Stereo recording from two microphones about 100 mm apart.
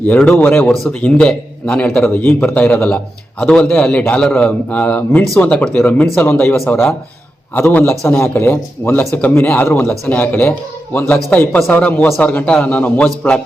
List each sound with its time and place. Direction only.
0.3 s a man's voice: 20° left (ahead or behind)
0.6 s a man's voice: centre (ahead or behind)